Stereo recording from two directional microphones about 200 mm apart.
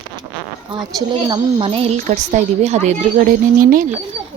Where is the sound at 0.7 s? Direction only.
20° right (ahead or behind); by 3.9 s 45° right (ahead or behind).